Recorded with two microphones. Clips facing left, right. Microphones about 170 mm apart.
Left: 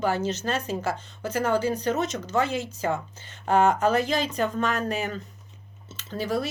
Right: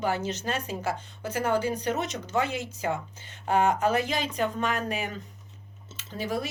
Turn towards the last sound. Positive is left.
turn(degrees=-15)  # may be behind; listen again after turning